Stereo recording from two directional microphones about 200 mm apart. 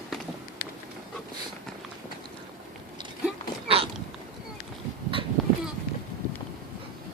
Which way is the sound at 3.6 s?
30° right (ahead or behind).